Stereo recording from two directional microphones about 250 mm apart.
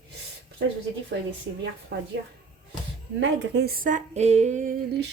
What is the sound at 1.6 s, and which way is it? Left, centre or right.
Speech, right.